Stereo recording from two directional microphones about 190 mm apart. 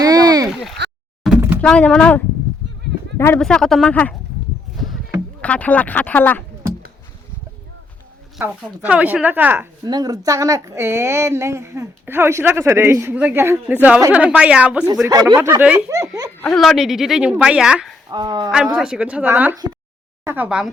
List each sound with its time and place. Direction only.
0.0 s a sound: 20° right (ahead or behind)
0.8 s a sound: 65° right (ahead or behind)
1.2 s thunk: 5° right (ahead or behind)
1.6 s a woman's voice: 5° left (ahead or behind)
3.4 s a woman's voice: centre (ahead or behind)
5.4 s speech: 5° left (ahead or behind)
8.4 s speech: 5° right (ahead or behind)
15.0 s speech: 15° right (ahead or behind)
16.6 s a woman's voice: centre (ahead or behind)
18.1 s speech: 25° right (ahead or behind)
18.5 s speech: 5° right (ahead or behind)